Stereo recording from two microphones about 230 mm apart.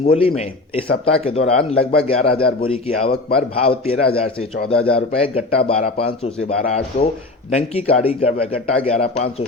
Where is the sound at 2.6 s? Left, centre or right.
Left.